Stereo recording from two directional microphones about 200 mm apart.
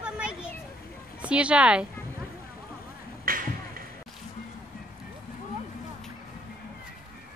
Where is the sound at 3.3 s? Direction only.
45° right (ahead or behind).